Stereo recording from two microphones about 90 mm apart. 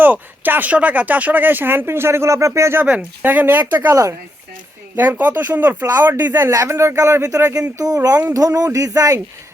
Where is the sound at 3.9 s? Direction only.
35° right (ahead or behind).